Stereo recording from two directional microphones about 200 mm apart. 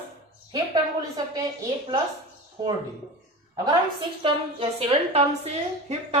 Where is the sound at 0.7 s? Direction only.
20° right (ahead or behind).